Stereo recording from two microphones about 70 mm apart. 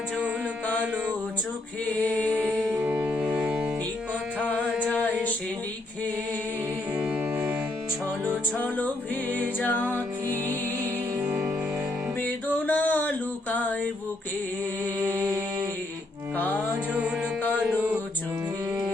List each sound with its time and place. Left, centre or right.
2.0 s singing: left
2.8 s music: right
6.9 s music: right
8.6 s music: centre
11.3 s music: centre
12.6 s a sound: left
15.1 s a sound: right
16.9 s music: centre